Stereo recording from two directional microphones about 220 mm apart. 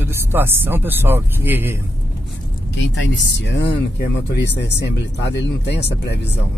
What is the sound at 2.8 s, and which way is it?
Speech, 55° left (ahead or behind).